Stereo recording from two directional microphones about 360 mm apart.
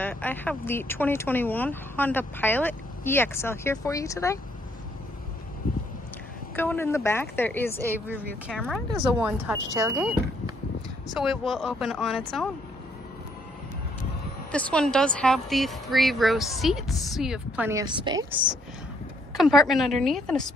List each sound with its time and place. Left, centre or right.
0.0 s speech: centre
5.6 s a sound: left
6.5 s a woman's voice: centre
14.5 s speech: centre
19.3 s speech: centre